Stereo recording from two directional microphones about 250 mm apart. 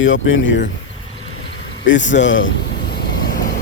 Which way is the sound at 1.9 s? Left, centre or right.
Left.